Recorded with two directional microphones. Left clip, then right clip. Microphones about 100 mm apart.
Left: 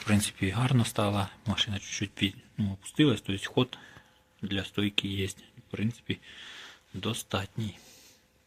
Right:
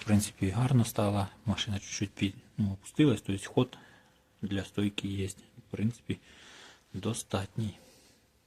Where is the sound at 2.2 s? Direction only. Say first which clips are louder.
Left 3 dB; 10° right (ahead or behind); by 7.8 s 25° right (ahead or behind).